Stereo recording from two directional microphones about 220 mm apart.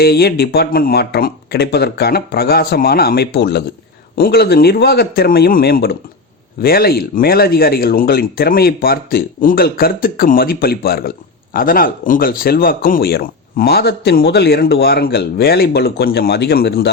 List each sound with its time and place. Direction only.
0.0 s speech: 45° left (ahead or behind)